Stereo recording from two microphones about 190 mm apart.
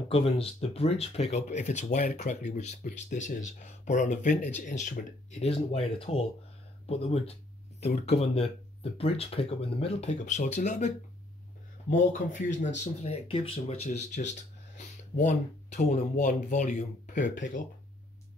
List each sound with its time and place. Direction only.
0.1 s speech: 30° left (ahead or behind)
11.9 s speech: 45° left (ahead or behind)